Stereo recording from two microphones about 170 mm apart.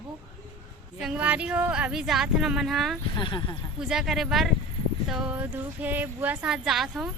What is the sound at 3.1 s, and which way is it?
Speech, 25° left (ahead or behind).